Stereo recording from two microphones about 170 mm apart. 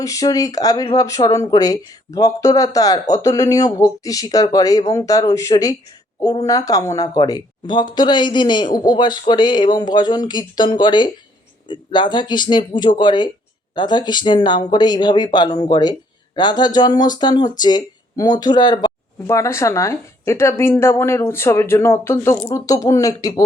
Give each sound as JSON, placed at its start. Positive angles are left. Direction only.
{"t": 0.0, "sound": "a woman's voice", "side_deg": 20}